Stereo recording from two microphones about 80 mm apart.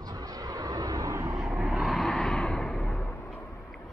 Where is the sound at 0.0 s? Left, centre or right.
Right.